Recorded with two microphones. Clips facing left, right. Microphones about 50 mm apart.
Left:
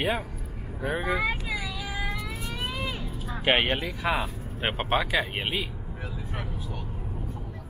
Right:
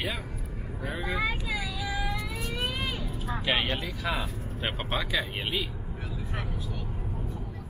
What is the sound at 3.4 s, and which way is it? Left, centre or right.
Speech, left.